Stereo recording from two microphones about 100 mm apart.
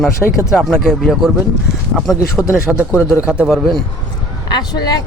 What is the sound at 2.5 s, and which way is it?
Speech, 10° right (ahead or behind).